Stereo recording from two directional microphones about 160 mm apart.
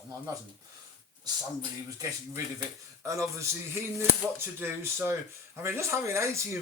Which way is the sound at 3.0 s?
20° right (ahead or behind).